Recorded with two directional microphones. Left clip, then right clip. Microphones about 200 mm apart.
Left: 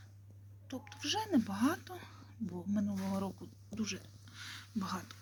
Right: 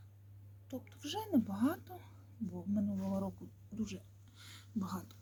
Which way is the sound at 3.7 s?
5° left (ahead or behind).